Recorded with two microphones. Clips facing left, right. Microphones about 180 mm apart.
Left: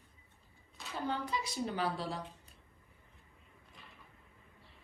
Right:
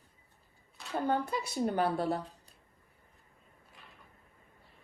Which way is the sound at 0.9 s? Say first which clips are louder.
Right 6 dB; 55° right (ahead or behind).